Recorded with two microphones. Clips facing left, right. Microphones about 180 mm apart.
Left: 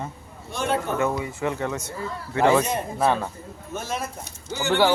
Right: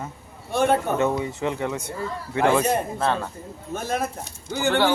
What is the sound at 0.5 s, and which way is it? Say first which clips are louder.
Speech: right 5 dB; 55° right (ahead or behind).